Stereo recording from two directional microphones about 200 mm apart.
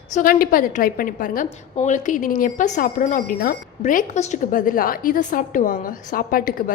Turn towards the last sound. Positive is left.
turn(degrees=45)  # may be behind; listen again after turning